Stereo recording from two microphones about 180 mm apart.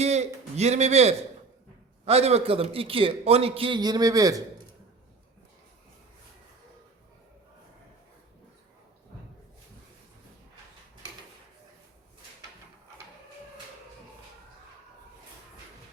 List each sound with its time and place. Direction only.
0.0 s a man's voice: 35° right (ahead or behind); by 4.4 s 20° right (ahead or behind)